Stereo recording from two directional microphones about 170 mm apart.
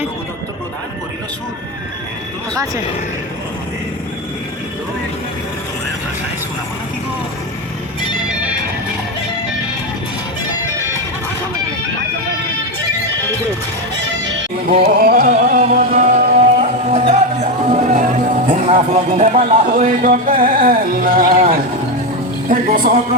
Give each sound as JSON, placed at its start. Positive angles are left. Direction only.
{"t": 14.8, "sound": "music", "side_deg": -50}
{"t": 22.4, "sound": "speech", "side_deg": -50}